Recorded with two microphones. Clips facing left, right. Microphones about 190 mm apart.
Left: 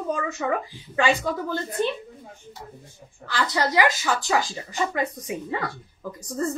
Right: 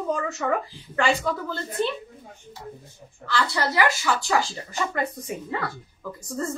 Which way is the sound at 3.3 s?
20° left (ahead or behind).